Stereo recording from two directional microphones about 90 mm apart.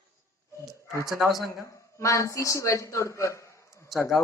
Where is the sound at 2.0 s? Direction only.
35° left (ahead or behind).